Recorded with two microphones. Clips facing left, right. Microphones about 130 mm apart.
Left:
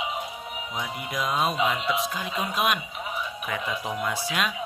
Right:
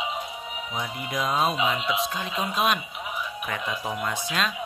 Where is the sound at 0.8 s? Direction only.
Centre (ahead or behind).